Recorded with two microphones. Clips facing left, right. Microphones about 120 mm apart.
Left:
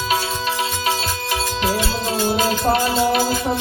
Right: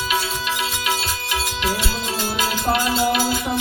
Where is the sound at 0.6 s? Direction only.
35° left (ahead or behind).